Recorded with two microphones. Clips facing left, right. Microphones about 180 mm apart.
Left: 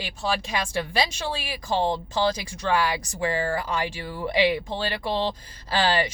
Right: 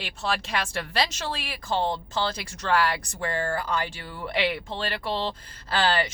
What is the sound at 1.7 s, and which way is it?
Speech, 15° left (ahead or behind).